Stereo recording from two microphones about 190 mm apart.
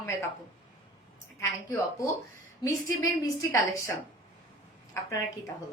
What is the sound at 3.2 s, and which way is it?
Speech, 15° left (ahead or behind).